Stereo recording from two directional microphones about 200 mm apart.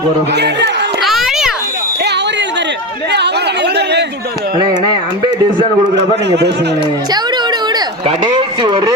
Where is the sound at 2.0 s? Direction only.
60° right (ahead or behind).